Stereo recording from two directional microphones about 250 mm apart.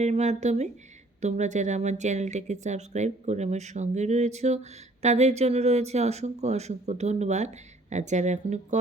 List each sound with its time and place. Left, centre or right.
0.0 s speech: right